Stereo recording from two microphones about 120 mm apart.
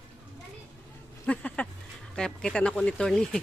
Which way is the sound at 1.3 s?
10° left (ahead or behind).